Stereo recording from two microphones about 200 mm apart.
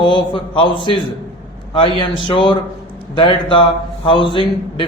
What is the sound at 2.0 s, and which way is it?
A man's voice, 25° left (ahead or behind).